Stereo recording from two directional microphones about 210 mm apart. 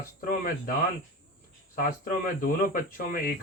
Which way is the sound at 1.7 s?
45° left (ahead or behind).